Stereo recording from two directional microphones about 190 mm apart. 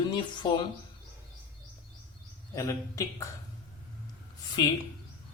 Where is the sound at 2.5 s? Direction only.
15° left (ahead or behind).